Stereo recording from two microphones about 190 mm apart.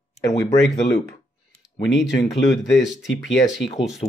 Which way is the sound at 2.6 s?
Centre (ahead or behind).